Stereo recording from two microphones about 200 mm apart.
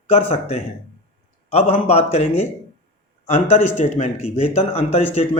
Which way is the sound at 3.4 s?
40° left (ahead or behind).